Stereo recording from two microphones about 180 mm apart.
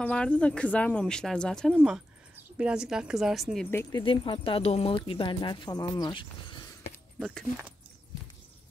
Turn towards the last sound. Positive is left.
turn(degrees=5)  # may be behind; listen again after turning